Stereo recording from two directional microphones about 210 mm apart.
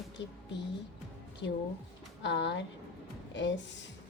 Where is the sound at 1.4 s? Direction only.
55° left (ahead or behind).